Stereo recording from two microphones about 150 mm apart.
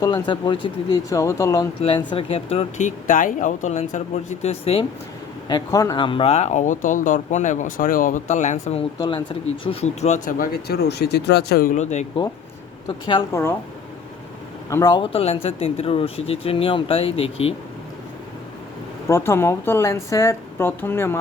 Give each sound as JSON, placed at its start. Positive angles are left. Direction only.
{"t": 0.0, "sound": "speech", "side_deg": 30}
{"t": 1.8, "sound": "speech", "side_deg": 35}
{"t": 5.5, "sound": "speech", "side_deg": 25}
{"t": 9.0, "sound": "speech", "side_deg": 35}
{"t": 10.3, "sound": "speech", "side_deg": 80}
{"t": 11.7, "sound": "speech", "side_deg": 50}
{"t": 14.7, "sound": "speech", "side_deg": 25}
{"t": 19.0, "sound": "a woman's voice", "side_deg": 20}